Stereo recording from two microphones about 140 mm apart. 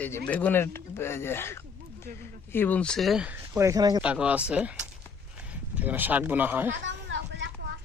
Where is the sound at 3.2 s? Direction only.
15° right (ahead or behind).